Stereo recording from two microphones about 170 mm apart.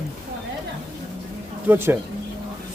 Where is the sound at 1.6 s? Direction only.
10° right (ahead or behind).